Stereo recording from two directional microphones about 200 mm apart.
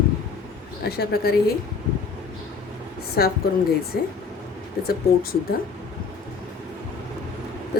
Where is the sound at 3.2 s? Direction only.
50° left (ahead or behind).